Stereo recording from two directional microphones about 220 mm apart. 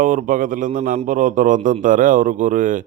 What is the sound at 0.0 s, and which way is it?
Speech, 35° right (ahead or behind).